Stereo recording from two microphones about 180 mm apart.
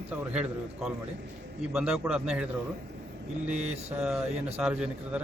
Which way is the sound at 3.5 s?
35° right (ahead or behind).